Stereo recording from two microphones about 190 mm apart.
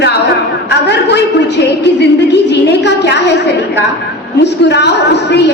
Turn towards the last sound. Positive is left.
turn(degrees=65)  # may be behind; listen again after turning